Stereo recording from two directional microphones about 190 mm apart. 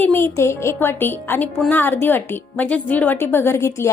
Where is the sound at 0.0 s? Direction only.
10° left (ahead or behind).